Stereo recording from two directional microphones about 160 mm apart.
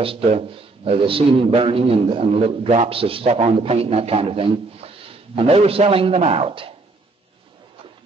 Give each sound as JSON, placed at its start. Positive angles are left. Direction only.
{"t": 0.0, "sound": "a man's voice", "side_deg": -35}